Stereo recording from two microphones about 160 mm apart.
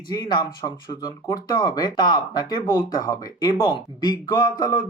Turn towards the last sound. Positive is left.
turn(degrees=25)  # may be behind; listen again after turning